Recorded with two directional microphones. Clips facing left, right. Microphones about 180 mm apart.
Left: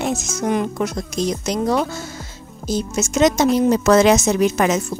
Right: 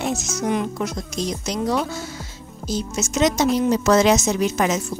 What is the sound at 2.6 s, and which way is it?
Speech, 55° left (ahead or behind).